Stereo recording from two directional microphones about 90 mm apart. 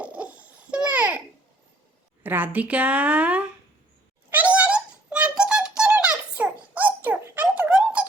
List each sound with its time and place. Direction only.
0.0 s babbling: 15° right (ahead or behind)
2.2 s a woman's voice: 20° right (ahead or behind)
4.3 s music: 15° right (ahead or behind)